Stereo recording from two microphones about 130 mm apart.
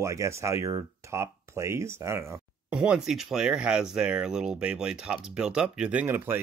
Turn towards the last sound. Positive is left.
turn(degrees=-15)  # may be behind; listen again after turning